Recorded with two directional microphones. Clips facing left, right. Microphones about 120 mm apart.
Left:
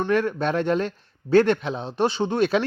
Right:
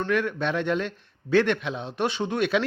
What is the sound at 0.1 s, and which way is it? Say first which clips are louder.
Speech: left 3 dB; 35° left (ahead or behind).